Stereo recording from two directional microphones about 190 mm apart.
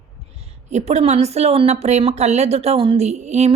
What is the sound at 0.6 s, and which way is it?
Speech, 35° right (ahead or behind).